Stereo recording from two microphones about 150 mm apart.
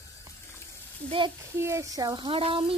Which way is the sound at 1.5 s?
20° right (ahead or behind).